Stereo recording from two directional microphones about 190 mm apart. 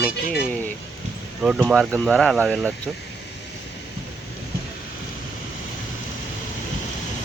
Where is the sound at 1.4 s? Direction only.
5° right (ahead or behind).